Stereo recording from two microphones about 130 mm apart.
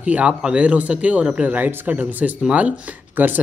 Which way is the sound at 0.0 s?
10° right (ahead or behind).